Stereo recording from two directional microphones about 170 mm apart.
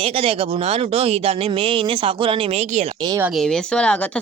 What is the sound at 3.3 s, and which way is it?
Speech, 5° left (ahead or behind).